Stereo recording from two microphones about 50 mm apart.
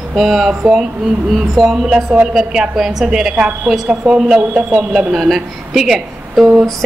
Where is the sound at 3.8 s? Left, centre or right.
Right.